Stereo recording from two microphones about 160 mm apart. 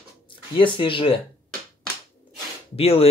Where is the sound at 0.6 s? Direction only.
30° left (ahead or behind).